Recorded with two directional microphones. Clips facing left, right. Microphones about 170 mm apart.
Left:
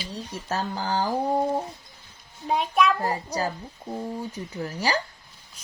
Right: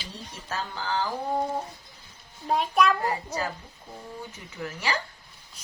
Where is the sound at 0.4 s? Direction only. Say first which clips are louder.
Left 4 dB; 40° left (ahead or behind).